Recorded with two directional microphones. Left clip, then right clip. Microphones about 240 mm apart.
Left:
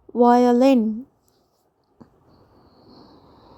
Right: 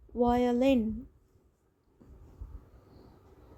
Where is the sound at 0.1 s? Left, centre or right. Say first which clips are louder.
Left 12 dB; left.